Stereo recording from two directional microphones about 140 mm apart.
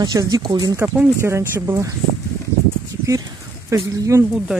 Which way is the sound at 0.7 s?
10° right (ahead or behind).